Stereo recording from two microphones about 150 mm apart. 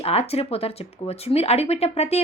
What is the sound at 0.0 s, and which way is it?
Speech, 45° left (ahead or behind).